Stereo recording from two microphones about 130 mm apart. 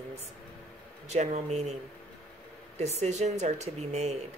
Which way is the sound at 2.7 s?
55° right (ahead or behind).